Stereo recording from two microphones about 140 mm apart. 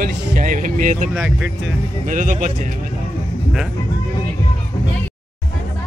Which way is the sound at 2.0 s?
70° right (ahead or behind).